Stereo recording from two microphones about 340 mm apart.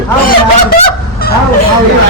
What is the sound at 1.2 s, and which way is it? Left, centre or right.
Fowl, left.